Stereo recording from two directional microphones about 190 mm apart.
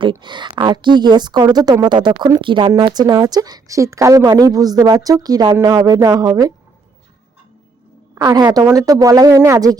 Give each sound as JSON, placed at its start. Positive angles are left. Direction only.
{"t": 0.0, "sound": "a woman's voice", "side_deg": -25}
{"t": 8.1, "sound": "a woman's voice", "side_deg": -15}